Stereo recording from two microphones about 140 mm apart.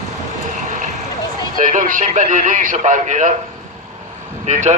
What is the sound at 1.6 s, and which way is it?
A man's voice, 70° right (ahead or behind).